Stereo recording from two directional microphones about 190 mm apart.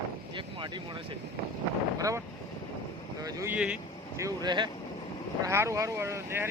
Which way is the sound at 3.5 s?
5° right (ahead or behind).